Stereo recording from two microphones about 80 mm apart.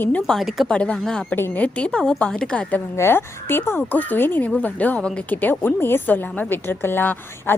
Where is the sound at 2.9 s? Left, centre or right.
Left.